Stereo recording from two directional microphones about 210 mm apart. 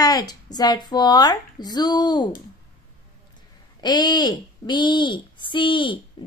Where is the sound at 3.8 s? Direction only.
20° left (ahead or behind).